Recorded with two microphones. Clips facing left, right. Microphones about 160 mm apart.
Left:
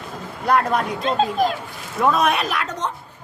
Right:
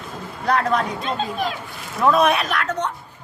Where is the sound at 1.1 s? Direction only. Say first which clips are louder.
Left 7 dB; 45° left (ahead or behind).